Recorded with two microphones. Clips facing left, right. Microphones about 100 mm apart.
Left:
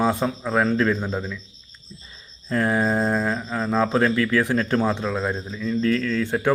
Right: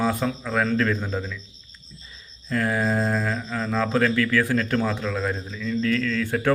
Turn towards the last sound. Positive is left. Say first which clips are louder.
# left 1 dB
turn(degrees=25)  # may be behind; listen again after turning